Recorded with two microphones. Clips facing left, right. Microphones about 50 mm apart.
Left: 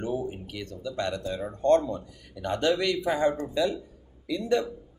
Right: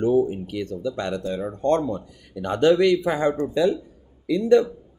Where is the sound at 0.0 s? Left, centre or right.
Centre.